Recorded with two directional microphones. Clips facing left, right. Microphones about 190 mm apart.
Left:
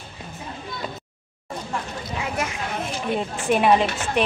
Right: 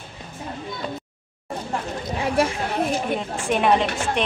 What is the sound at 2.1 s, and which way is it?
Speech, 30° right (ahead or behind).